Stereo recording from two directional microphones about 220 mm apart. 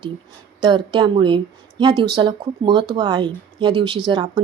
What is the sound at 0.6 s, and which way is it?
Speech, 20° right (ahead or behind).